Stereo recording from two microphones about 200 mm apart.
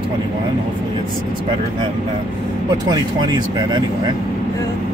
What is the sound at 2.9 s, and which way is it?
Speech, 20° right (ahead or behind).